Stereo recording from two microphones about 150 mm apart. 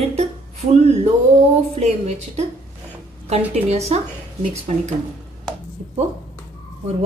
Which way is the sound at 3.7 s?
45° right (ahead or behind).